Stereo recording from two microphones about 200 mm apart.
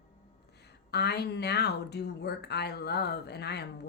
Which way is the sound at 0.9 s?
55° left (ahead or behind).